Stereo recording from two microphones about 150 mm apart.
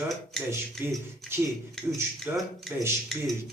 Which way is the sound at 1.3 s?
15° right (ahead or behind).